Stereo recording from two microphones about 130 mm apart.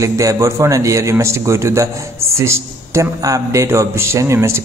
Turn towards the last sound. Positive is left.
turn(degrees=-20)  # may be behind; listen again after turning